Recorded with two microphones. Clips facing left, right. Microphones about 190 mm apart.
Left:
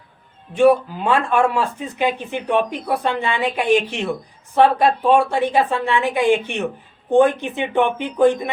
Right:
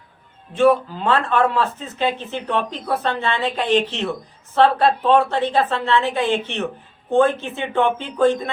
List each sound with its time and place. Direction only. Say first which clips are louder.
0.5 s speech: left 2 dB; 15° left (ahead or behind)